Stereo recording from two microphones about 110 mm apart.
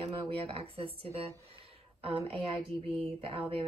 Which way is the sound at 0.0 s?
55° right (ahead or behind).